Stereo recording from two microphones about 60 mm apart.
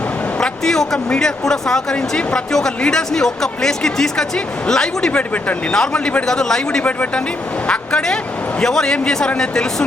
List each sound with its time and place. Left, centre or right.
0.3 s a sound: centre
1.1 s speech: centre
6.8 s speech: left